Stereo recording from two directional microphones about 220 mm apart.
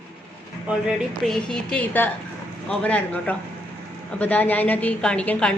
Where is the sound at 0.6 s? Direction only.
5° right (ahead or behind).